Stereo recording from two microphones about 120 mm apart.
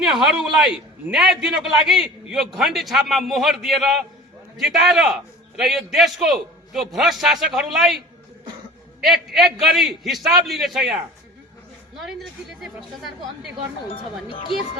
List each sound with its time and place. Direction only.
0.1 s a man's voice: 5° right (ahead or behind)
11.9 s a man's voice: centre (ahead or behind)
13.9 s speech: 50° left (ahead or behind)